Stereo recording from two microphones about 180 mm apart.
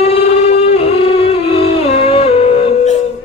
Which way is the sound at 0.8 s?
35° left (ahead or behind).